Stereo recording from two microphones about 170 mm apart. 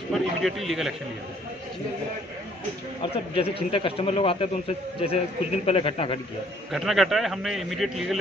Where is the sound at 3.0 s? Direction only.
35° left (ahead or behind).